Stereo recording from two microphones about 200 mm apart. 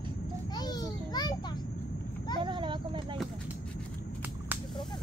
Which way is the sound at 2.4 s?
25° right (ahead or behind).